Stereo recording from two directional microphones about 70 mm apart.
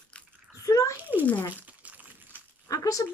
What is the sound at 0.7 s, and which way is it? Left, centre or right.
Speech, left.